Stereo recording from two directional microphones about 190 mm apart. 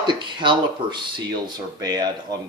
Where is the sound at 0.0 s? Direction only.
25° right (ahead or behind).